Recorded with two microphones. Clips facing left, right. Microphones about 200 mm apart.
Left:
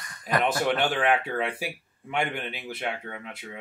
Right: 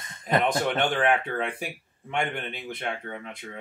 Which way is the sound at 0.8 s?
5° left (ahead or behind).